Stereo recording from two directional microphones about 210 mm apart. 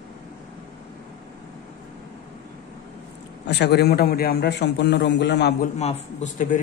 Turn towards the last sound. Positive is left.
turn(degrees=35)  # may be behind; listen again after turning